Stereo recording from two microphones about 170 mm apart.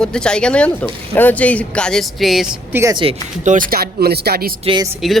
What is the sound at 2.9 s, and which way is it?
Speech, 30° right (ahead or behind).